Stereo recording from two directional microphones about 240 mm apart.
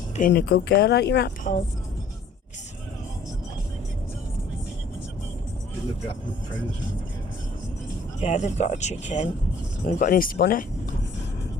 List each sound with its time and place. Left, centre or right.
0.2 s speech: left
8.2 s speech: left